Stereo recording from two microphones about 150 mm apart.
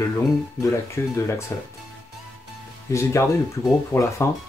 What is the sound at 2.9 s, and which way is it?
Speech, 20° left (ahead or behind).